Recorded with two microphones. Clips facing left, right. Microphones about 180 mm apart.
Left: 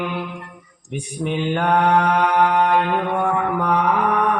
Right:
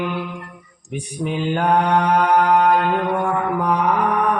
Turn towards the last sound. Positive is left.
turn(degrees=-40)  # may be behind; listen again after turning